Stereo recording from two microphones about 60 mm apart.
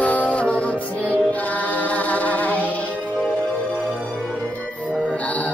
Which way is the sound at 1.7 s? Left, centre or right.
Left.